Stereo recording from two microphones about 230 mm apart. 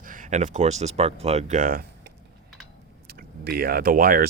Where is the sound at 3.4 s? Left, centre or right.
Right.